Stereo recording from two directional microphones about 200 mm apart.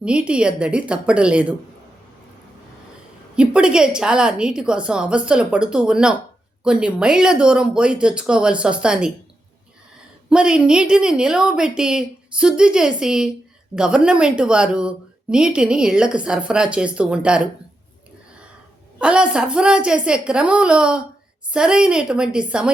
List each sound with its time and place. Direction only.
0.0 s speech: 5° right (ahead or behind)
3.3 s speech: 5° right (ahead or behind)
10.2 s speech: 5° right (ahead or behind)
18.9 s speech: 5° right (ahead or behind)